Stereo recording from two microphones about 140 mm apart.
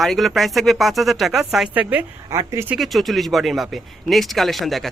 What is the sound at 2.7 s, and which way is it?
Speech, centre (ahead or behind).